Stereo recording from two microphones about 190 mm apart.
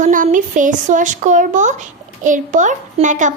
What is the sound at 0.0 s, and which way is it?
A woman's voice, 45° right (ahead or behind).